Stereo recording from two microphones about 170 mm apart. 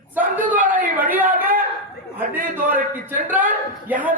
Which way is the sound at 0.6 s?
55° right (ahead or behind).